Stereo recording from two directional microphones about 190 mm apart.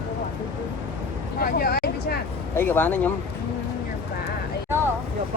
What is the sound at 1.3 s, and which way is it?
Vehicle, 50° left (ahead or behind).